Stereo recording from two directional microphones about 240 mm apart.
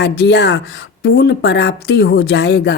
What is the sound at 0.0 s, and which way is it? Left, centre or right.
A woman's voice, left.